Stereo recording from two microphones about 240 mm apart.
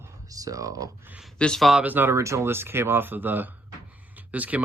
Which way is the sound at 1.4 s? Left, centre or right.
Centre.